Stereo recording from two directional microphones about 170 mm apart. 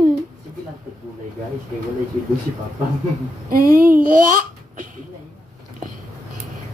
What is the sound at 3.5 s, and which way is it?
A child's voice, 60° right (ahead or behind).